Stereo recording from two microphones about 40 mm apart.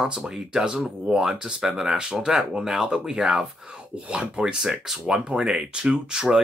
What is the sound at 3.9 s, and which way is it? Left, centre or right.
Speech, right.